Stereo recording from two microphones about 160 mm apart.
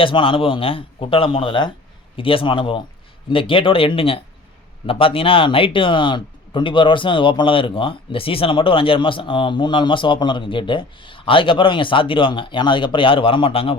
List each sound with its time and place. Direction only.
0.0 s speech: 35° left (ahead or behind)